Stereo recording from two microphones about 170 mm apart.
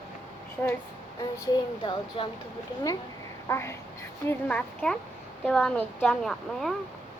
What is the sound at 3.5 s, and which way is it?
A woman's voice, 15° left (ahead or behind).